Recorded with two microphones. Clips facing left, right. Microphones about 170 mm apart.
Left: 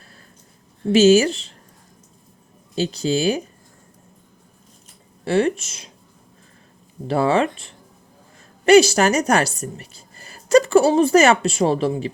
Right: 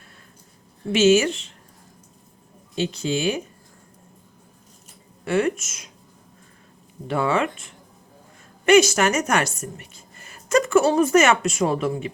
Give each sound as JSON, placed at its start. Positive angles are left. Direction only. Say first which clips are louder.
{"t": 0.9, "sound": "a woman's voice", "louder": "left 3 dB", "side_deg": 35}
{"t": 2.7, "sound": "a woman's voice", "louder": "left 3 dB", "side_deg": 35}
{"t": 5.2, "sound": "a woman's voice", "louder": "left 3 dB", "side_deg": 30}
{"t": 7.1, "sound": "a woman's voice", "louder": "left 4 dB", "side_deg": 35}